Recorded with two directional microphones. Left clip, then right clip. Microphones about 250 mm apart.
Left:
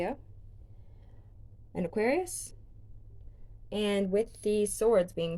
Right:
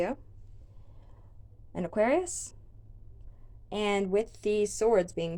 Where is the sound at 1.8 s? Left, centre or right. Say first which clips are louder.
Right 3 dB; centre.